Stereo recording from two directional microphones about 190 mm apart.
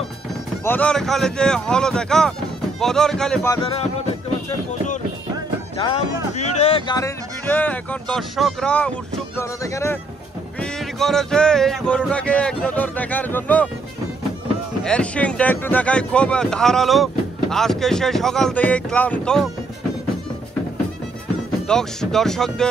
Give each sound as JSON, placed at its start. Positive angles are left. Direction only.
{"t": 0.7, "sound": "speech", "side_deg": 5}
{"t": 5.8, "sound": "speech", "side_deg": 30}
{"t": 6.9, "sound": "speech", "side_deg": 15}
{"t": 10.6, "sound": "speech", "side_deg": 0}
{"t": 14.9, "sound": "speech", "side_deg": 5}
{"t": 21.6, "sound": "speech", "side_deg": 5}